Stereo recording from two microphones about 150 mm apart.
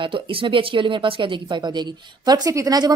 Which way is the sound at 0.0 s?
35° right (ahead or behind).